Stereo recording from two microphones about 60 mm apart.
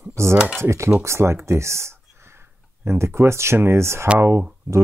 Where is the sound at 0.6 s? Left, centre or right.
Right.